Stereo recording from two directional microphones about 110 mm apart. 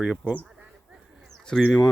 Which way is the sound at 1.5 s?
5° left (ahead or behind).